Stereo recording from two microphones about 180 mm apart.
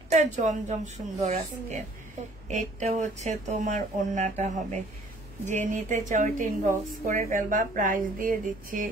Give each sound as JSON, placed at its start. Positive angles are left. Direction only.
{"t": 0.1, "sound": "speech", "side_deg": -40}
{"t": 5.5, "sound": "a woman's voice", "side_deg": -45}